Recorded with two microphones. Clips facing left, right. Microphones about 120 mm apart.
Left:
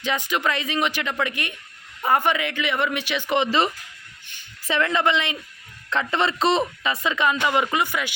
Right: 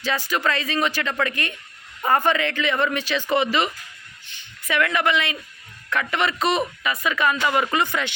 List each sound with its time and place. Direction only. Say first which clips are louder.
0.0 s speech: even; 20° left (ahead or behind)
3.4 s speech: left 1 dB; 30° left (ahead or behind); by 8.1 s 10° left (ahead or behind)